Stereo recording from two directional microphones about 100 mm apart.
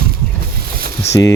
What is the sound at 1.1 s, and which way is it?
Speech, 30° left (ahead or behind).